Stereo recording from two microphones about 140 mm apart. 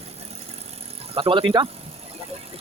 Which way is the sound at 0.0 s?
50° right (ahead or behind).